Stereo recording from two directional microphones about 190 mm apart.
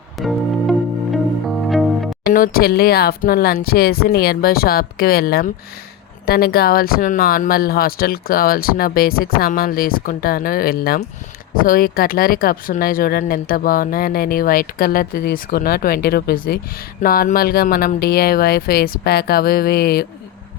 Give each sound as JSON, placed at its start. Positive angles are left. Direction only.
{"t": 0.2, "sound": "music", "side_deg": 0}
{"t": 2.2, "sound": "speech", "side_deg": 50}